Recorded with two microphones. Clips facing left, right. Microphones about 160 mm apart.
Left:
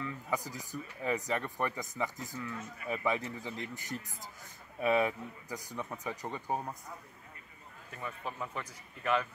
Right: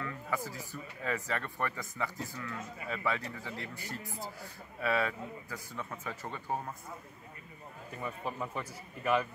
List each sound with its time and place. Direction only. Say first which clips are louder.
0.0 s speech: even; 15° left (ahead or behind)
7.9 s a man's voice: right 2 dB; 5° right (ahead or behind)